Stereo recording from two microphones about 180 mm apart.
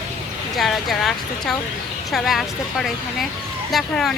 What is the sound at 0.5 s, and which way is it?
Speech, centre (ahead or behind).